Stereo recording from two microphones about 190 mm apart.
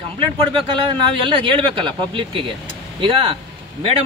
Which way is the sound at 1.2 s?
25° right (ahead or behind).